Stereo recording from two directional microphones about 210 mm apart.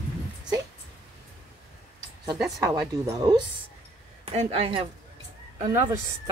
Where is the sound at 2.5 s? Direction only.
10° right (ahead or behind).